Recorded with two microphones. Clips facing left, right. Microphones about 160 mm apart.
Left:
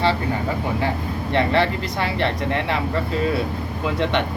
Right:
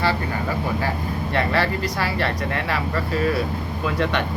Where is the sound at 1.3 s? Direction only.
20° left (ahead or behind).